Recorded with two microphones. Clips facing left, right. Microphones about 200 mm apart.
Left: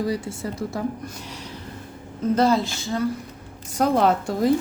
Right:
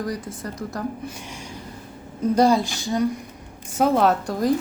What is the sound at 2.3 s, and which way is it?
Speech, 15° right (ahead or behind).